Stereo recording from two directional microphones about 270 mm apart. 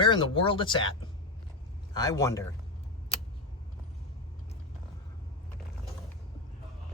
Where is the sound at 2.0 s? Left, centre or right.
Centre.